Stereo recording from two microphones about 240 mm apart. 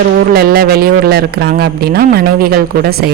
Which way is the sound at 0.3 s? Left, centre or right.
Right.